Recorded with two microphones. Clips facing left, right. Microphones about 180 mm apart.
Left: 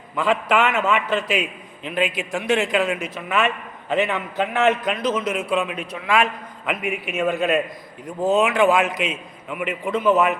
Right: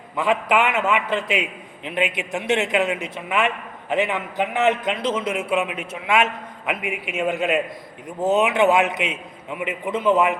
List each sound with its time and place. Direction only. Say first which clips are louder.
0.2 s a man's voice: even; 20° right (ahead or behind)
6.9 s a man's voice: left 2 dB; 20° left (ahead or behind)
7.2 s a man's voice: left 1 dB; 20° right (ahead or behind)